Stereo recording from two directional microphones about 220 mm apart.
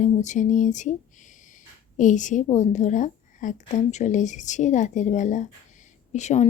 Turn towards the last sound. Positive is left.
turn(degrees=30)  # may be behind; listen again after turning